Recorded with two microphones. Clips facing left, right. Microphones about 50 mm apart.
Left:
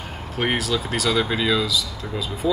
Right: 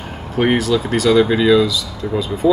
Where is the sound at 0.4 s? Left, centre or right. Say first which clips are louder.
Right 7 dB; centre.